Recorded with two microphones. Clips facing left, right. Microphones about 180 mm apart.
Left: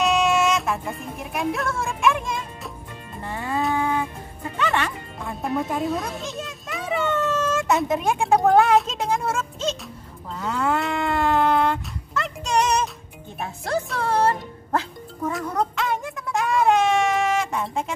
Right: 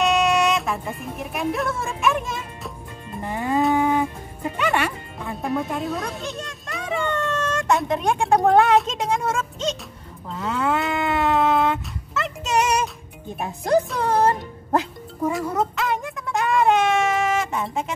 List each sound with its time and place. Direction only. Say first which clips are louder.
0.0 s music: right 1 dB; centre (ahead or behind)
3.3 s livestock: right 4 dB; 15° right (ahead or behind)
3.7 s music: right 4 dB; 15° right (ahead or behind)
4.6 s music: right 2 dB; 5° right (ahead or behind)
10.3 s dog: right 1 dB; centre (ahead or behind)
13.4 s speech: right 6 dB; 15° right (ahead or behind)
15.3 s a sound: right 1 dB; 5° right (ahead or behind)